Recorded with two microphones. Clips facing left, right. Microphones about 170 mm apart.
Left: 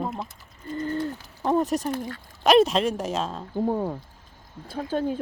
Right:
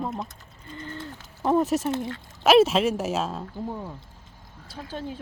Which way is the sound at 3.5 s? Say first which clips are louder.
Left 8 dB; 55° left (ahead or behind).